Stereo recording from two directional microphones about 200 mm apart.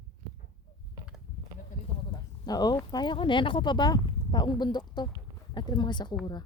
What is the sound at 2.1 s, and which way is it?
Speech, 20° left (ahead or behind).